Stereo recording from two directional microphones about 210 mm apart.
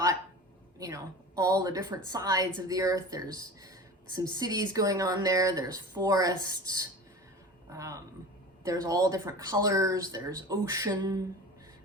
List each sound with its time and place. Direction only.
0.8 s speech: 15° right (ahead or behind)